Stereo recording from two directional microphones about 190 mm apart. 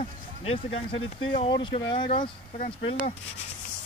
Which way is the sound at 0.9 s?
90° left.